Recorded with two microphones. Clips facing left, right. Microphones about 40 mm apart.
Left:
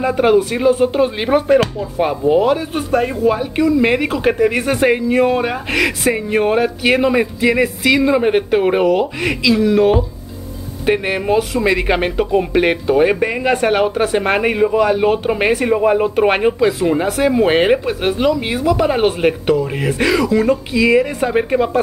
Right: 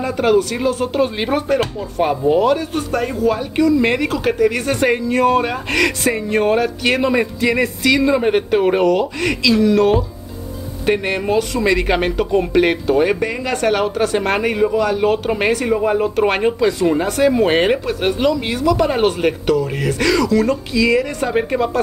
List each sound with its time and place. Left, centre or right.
0.0 s speech: centre
4.6 s speech: centre; by 15.0 s left
15.0 s speech: centre
18.3 s speech: centre